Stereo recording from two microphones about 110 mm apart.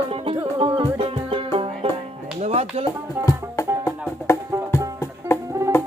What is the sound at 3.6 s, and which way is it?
Music, 25° left (ahead or behind).